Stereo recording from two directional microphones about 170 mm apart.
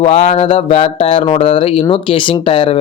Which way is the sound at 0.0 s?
40° left (ahead or behind).